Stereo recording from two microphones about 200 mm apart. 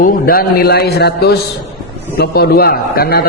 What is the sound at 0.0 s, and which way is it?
A man's voice, 45° left (ahead or behind).